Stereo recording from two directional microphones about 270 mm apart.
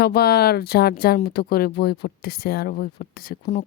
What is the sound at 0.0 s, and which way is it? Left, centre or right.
A woman's voice, left.